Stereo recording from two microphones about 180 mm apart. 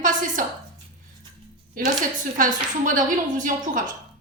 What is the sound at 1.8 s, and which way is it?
A woman's voice, 50° right (ahead or behind).